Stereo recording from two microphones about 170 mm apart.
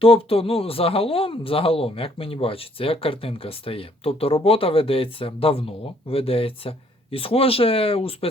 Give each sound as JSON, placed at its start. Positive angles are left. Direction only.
{"t": 0.0, "sound": "speech", "side_deg": 35}